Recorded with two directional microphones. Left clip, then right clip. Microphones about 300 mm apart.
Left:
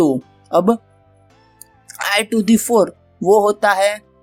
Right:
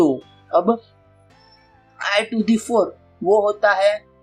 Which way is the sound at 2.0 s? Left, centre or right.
Left.